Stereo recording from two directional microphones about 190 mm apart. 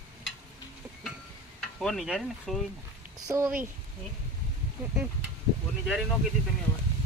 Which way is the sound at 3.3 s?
10° right (ahead or behind).